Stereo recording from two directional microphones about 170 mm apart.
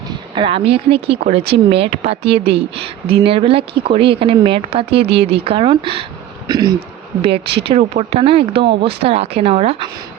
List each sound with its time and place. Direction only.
0.3 s speech: 30° right (ahead or behind)
6.5 s insect: 25° right (ahead or behind)
6.7 s speech: 35° right (ahead or behind)